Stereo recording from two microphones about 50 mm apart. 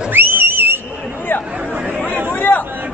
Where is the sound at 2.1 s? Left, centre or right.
Left.